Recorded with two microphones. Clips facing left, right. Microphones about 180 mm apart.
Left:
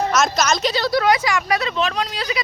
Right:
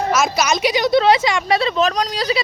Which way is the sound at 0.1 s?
10° right (ahead or behind).